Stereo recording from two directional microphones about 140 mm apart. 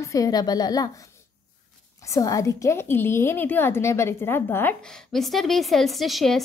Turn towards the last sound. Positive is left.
turn(degrees=0)  # may be behind; listen again after turning